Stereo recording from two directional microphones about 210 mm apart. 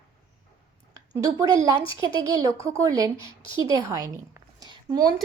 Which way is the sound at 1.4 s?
15° right (ahead or behind).